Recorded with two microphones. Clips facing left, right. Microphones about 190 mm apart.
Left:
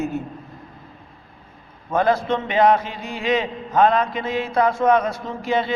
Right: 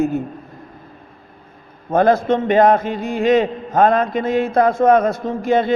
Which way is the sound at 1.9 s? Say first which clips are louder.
Right 5 dB; 50° right (ahead or behind).